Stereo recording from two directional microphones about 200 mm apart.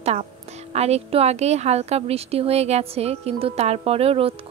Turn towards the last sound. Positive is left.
turn(degrees=-30)  # may be behind; listen again after turning